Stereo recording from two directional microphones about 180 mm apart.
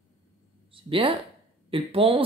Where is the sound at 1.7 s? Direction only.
30° right (ahead or behind).